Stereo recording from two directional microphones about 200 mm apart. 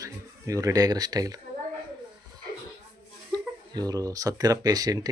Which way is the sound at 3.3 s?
20° right (ahead or behind).